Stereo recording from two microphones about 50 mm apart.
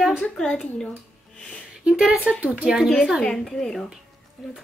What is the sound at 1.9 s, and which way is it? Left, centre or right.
Speech, centre.